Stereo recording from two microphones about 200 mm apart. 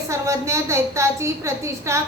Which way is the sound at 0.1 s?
15° right (ahead or behind).